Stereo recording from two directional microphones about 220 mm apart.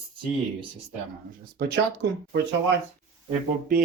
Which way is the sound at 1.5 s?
45° right (ahead or behind).